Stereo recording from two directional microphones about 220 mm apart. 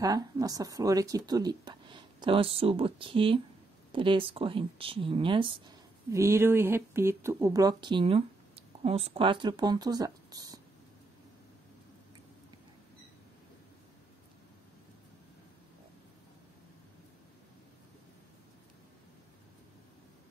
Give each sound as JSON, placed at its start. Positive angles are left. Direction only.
{"t": 0.0, "sound": "speech", "side_deg": -15}
{"t": 6.1, "sound": "speech", "side_deg": -10}